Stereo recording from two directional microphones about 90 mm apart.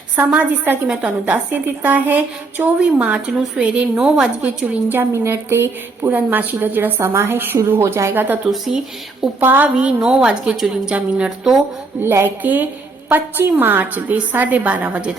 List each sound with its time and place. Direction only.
0.2 s a woman's voice: 20° right (ahead or behind)
4.4 s a woman's voice: 20° right (ahead or behind)
8.4 s speech: 5° right (ahead or behind)
9.4 s a woman's voice: 20° right (ahead or behind)
9.7 s a woman's voice: 10° right (ahead or behind)
12.0 s a woman's voice: 25° right (ahead or behind)